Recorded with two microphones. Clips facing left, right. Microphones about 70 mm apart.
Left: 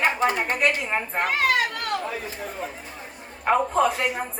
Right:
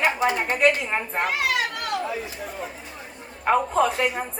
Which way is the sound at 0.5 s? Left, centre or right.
Centre.